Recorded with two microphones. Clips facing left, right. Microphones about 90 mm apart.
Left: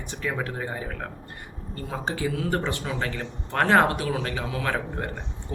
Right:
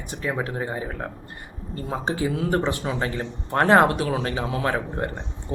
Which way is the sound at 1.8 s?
25° right (ahead or behind).